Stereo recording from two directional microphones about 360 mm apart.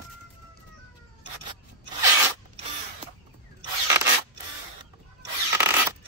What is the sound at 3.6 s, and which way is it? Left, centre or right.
Zipper, centre.